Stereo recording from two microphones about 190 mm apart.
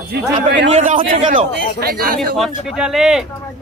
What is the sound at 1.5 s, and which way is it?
Speech, 55° right (ahead or behind).